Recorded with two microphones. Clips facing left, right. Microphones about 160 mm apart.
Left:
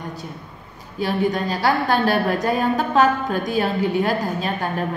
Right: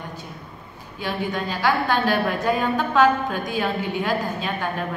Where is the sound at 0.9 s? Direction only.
40° left (ahead or behind).